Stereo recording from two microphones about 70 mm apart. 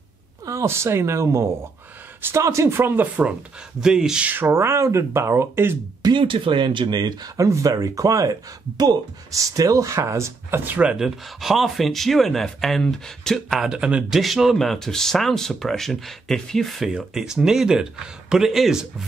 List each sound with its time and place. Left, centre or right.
0.7 s speech: right
3.8 s speech: centre
4.3 s speech: right
6.0 s speech: right
7.3 s speech: right
10.8 s speech: centre
13.6 s speech: centre
14.1 s speech: centre
16.9 s speech: centre